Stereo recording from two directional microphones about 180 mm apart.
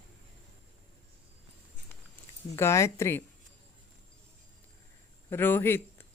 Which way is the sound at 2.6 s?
15° left (ahead or behind).